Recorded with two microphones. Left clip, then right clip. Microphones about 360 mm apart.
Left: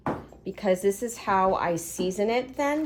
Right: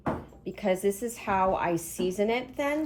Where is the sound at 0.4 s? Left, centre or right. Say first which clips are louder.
Left 3 dB; left.